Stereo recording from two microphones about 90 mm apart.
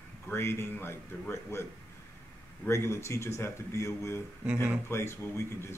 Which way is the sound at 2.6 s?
30° left (ahead or behind).